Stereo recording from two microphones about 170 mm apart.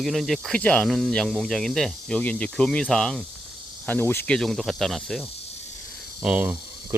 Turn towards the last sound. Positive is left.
turn(degrees=-10)  # may be behind; listen again after turning